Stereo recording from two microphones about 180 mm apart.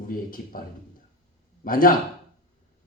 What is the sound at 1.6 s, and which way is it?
Speech, 50° left (ahead or behind).